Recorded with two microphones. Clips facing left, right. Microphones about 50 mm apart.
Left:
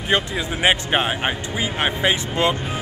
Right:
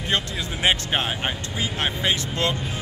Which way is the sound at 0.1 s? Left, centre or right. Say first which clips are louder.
Left 5 dB; centre.